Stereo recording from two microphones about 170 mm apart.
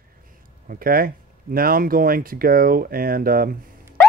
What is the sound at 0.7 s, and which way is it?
Speech, 60° right (ahead or behind).